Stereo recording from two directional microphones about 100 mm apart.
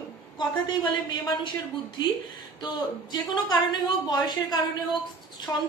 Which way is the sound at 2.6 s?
45° left (ahead or behind).